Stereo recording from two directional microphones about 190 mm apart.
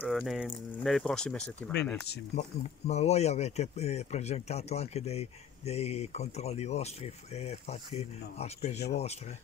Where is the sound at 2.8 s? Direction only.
35° left (ahead or behind).